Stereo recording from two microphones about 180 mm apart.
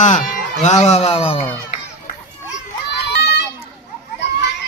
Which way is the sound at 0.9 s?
35° left (ahead or behind).